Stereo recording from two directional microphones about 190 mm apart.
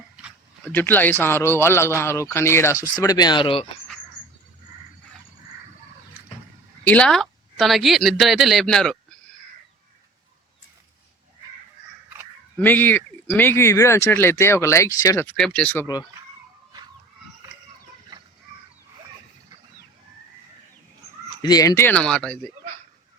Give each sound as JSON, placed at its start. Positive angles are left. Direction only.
{"t": 0.6, "sound": "speech", "side_deg": 10}
{"t": 6.8, "sound": "speech", "side_deg": 5}
{"t": 12.5, "sound": "speech", "side_deg": 10}
{"t": 21.4, "sound": "speech", "side_deg": 20}